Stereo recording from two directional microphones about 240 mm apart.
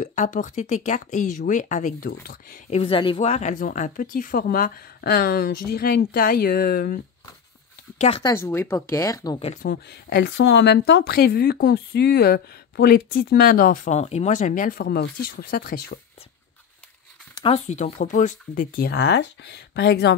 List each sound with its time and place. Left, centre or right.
0.0 s speech: left
2.8 s speech: left
8.0 s speech: centre
9.5 s speech: left
17.4 s speech: left